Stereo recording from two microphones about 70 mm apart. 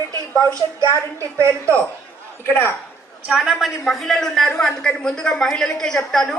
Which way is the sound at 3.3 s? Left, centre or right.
Centre.